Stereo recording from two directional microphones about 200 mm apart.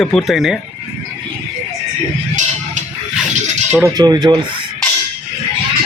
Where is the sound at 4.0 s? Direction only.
20° right (ahead or behind).